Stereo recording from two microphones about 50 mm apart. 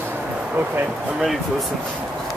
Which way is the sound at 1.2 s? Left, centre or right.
Centre.